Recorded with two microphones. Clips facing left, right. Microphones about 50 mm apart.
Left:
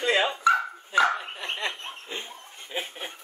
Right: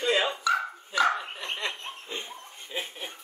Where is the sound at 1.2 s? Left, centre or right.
Centre.